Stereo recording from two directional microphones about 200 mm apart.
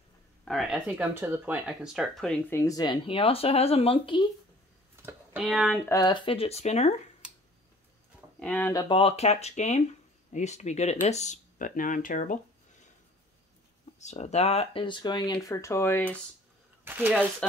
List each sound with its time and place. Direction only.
0.5 s speech: centre (ahead or behind)
2.6 s speech: 20° left (ahead or behind)
5.4 s speech: centre (ahead or behind)
5.9 s speech: 20° left (ahead or behind); by 6.9 s 35° left (ahead or behind)
8.4 s speech: 10° left (ahead or behind)
8.8 s speech: 25° left (ahead or behind)
13.9 s speech: 35° left (ahead or behind); by 16.2 s 10° left (ahead or behind)
16.8 s speech: 10° right (ahead or behind)
17.4 s speech: 5° left (ahead or behind)